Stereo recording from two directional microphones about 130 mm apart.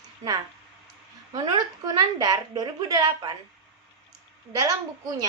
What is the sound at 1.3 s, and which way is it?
A woman's voice, 35° right (ahead or behind).